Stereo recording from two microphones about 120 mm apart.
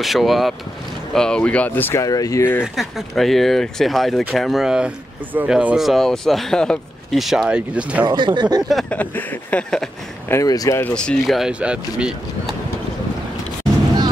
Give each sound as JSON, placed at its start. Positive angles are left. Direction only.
{"t": 0.0, "sound": "speech", "side_deg": 0}
{"t": 1.1, "sound": "a sound", "side_deg": 5}
{"t": 2.0, "sound": "speech", "side_deg": 30}
{"t": 2.6, "sound": "speech", "side_deg": 0}
{"t": 5.9, "sound": "speech", "side_deg": 0}
{"t": 8.1, "sound": "speech", "side_deg": -40}
{"t": 8.9, "sound": "a sound", "side_deg": 15}
{"t": 10.2, "sound": "speech", "side_deg": 25}
{"t": 10.8, "sound": "speech", "side_deg": 10}